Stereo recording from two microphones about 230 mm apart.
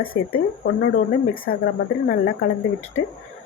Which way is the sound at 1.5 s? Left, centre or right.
Left.